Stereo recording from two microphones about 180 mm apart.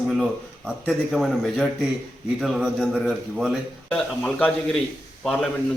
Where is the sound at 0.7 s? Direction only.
Centre (ahead or behind).